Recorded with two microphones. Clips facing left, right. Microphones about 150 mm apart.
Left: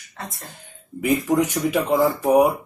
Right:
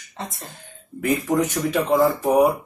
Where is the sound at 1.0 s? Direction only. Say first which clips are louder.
Left 1 dB; 10° left (ahead or behind).